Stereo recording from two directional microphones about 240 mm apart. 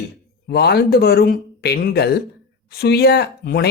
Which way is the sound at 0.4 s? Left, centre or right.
Left.